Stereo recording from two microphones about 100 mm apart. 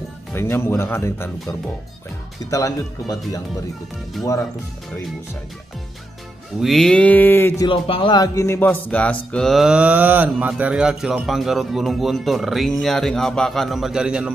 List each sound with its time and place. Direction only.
0.3 s speech: 25° left (ahead or behind)
2.5 s speech: 35° left (ahead or behind)
6.6 s a sound: centre (ahead or behind); by 7.5 s 20° left (ahead or behind)
7.6 s speech: 60° left (ahead or behind)
8.2 s speech: 30° left (ahead or behind)
8.5 s a sound: 15° left (ahead or behind)
9.3 s speech: 5° left (ahead or behind)